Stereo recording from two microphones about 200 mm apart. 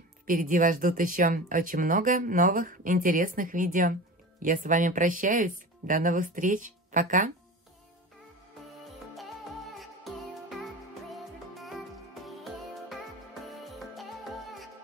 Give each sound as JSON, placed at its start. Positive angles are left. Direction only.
{"t": 0.3, "sound": "speech", "side_deg": -40}
{"t": 8.8, "sound": "music", "side_deg": 0}
{"t": 13.5, "sound": "music", "side_deg": 0}